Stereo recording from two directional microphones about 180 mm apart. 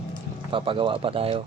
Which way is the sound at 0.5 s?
30° right (ahead or behind).